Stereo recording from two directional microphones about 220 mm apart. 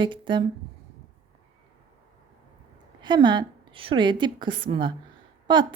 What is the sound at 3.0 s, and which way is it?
A woman's voice, 20° right (ahead or behind).